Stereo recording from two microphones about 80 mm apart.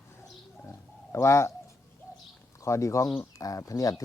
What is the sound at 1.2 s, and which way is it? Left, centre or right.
Speech, left.